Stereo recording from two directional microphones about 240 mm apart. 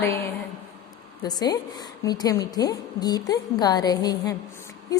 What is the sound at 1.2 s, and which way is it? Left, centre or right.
A woman's voice, centre.